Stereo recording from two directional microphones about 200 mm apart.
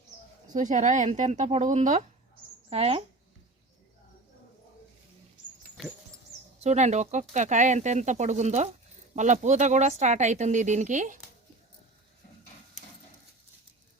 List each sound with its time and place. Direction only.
0.5 s speech: 40° right (ahead or behind)
6.6 s speech: 35° right (ahead or behind)